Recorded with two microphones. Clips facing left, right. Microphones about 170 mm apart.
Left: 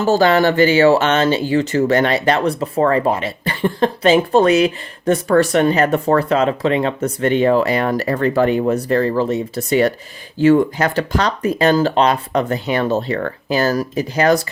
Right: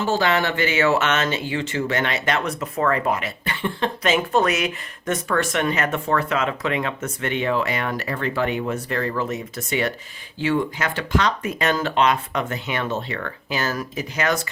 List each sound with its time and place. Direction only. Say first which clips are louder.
0.0 s speech: left 8 dB; 40° left (ahead or behind)